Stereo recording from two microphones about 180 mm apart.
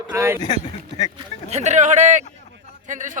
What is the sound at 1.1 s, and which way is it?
A man's voice, 40° right (ahead or behind).